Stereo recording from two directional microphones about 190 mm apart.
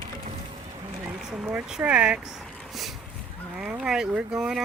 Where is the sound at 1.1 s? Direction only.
5° right (ahead or behind).